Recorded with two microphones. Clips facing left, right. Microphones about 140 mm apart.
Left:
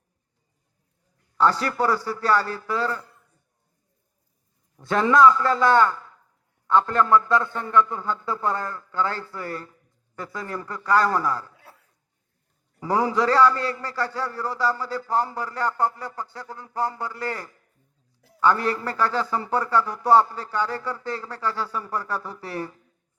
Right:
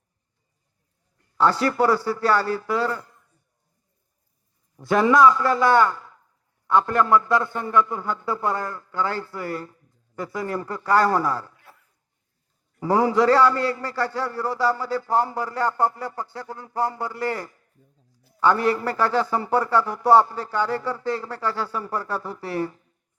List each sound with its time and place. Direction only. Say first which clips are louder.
1.4 s speech: right 2 dB; 25° right (ahead or behind)
2.6 s a man's voice: right 2 dB; 15° right (ahead or behind)
4.8 s a man's voice: right 1 dB; 15° right (ahead or behind)
12.8 s speech: right 3 dB; 25° right (ahead or behind)